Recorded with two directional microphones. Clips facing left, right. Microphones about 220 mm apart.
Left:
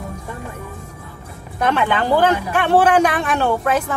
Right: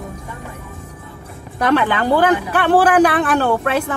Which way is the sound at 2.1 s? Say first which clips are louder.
Right 1 dB; 35° right (ahead or behind).